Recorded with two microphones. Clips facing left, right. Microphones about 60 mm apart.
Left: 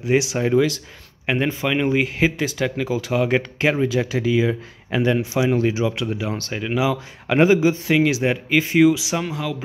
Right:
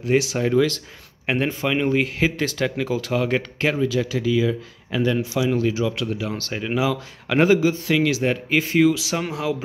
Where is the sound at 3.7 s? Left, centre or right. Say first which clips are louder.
Left 1 dB; left.